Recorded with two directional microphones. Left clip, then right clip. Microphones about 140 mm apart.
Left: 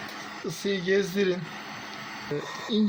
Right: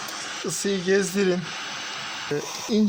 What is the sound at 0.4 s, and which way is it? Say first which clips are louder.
Speech: right 3 dB; 60° right (ahead or behind).